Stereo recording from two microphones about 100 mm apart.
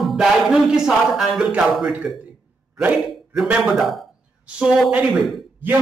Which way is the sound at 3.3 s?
5° right (ahead or behind).